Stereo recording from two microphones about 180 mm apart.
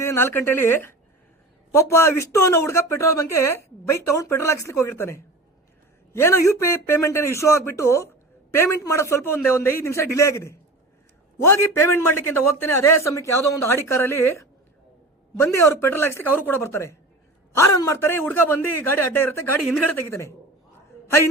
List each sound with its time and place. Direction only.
0.0 s a woman's voice: 15° left (ahead or behind)
15.5 s speech: 15° left (ahead or behind)